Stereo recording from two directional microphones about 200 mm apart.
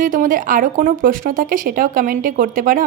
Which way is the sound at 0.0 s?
40° right (ahead or behind).